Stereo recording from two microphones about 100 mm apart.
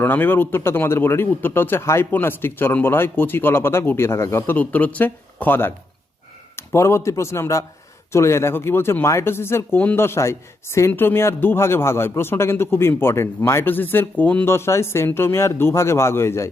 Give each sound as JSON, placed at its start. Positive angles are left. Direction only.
{"t": 0.0, "sound": "a man's voice", "side_deg": 20}
{"t": 14.5, "sound": "a man's voice", "side_deg": 25}